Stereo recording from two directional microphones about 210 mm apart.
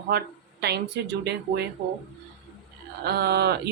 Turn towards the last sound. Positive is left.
turn(degrees=-50)  # may be behind; listen again after turning